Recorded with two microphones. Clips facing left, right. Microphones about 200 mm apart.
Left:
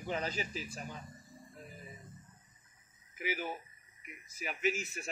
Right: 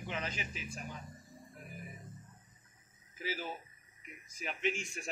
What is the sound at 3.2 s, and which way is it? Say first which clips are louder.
Speech: left 2 dB; 15° left (ahead or behind).